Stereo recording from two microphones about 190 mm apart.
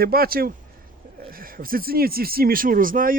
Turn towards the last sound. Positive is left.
turn(degrees=-45)  # may be behind; listen again after turning